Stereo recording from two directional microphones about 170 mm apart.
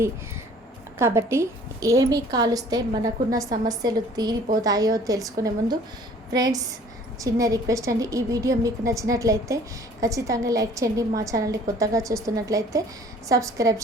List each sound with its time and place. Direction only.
0.9 s a woman's voice: 15° right (ahead or behind)